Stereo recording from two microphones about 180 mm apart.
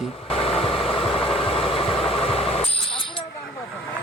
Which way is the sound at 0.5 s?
30° left (ahead or behind).